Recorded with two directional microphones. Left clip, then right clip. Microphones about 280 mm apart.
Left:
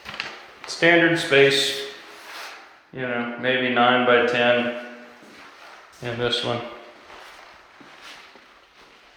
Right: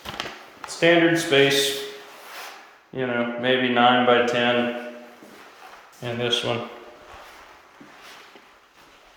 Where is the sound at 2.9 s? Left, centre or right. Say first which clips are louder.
Right 2 dB; centre.